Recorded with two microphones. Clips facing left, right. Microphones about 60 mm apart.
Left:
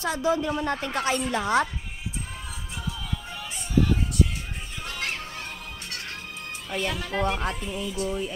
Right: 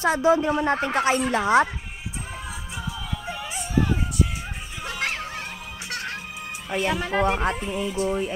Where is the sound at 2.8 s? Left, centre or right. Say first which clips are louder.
Even; centre.